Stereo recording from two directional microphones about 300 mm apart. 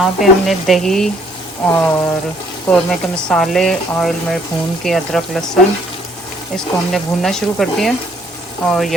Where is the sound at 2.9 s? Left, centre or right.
Centre.